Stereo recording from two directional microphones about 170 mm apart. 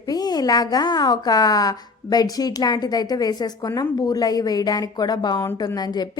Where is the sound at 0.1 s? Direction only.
25° left (ahead or behind).